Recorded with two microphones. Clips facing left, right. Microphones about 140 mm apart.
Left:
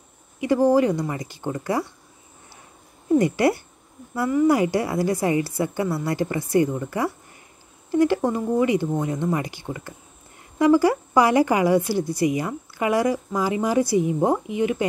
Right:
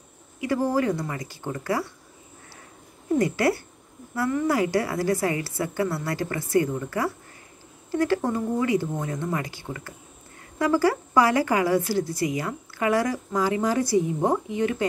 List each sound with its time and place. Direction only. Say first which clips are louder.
0.4 s a woman's voice: left 6 dB; 20° left (ahead or behind)
3.2 s a woman's voice: left 3 dB; 20° left (ahead or behind)